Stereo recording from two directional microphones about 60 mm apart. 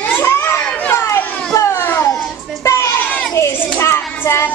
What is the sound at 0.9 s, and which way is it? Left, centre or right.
Children playing, left.